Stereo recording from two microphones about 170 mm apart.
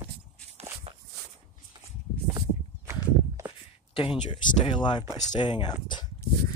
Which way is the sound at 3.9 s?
30° left (ahead or behind).